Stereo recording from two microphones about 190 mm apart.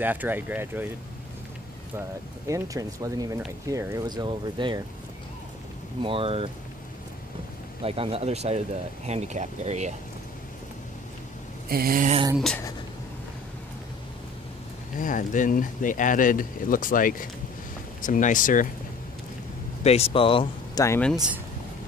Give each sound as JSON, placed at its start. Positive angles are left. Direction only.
{"t": 0.0, "sound": "speech", "side_deg": -10}
{"t": 2.0, "sound": "speech", "side_deg": -15}
{"t": 6.0, "sound": "speech", "side_deg": -30}
{"t": 7.8, "sound": "speech", "side_deg": -30}
{"t": 11.7, "sound": "a sound", "side_deg": -50}
{"t": 15.0, "sound": "speech", "side_deg": 45}
{"t": 19.8, "sound": "speech", "side_deg": 35}
{"t": 20.8, "sound": "speech", "side_deg": 15}
{"t": 21.1, "sound": "speech", "side_deg": -5}